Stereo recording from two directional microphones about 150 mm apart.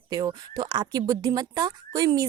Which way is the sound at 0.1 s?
25° right (ahead or behind).